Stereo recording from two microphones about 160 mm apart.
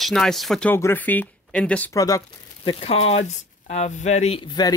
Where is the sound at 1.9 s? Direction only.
20° left (ahead or behind).